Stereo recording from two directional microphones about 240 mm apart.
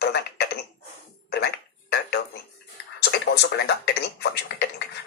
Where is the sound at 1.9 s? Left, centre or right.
Left.